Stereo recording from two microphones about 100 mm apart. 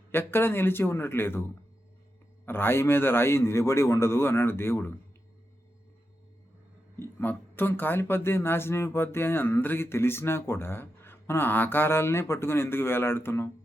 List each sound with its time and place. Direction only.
0.1 s speech: 20° left (ahead or behind)
2.5 s speech: 20° left (ahead or behind)
7.0 s speech: 20° left (ahead or behind)